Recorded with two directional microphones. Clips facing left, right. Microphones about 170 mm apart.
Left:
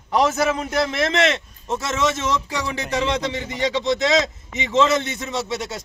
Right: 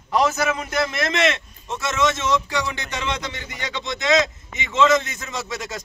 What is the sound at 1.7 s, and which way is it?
A man's voice, 30° left (ahead or behind).